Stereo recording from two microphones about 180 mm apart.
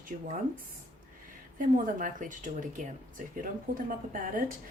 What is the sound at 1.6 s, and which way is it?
Speech, 45° right (ahead or behind).